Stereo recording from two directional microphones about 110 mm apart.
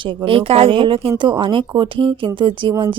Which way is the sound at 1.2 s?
45° right (ahead or behind).